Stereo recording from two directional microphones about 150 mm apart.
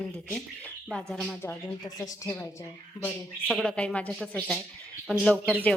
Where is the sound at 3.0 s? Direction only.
5° left (ahead or behind).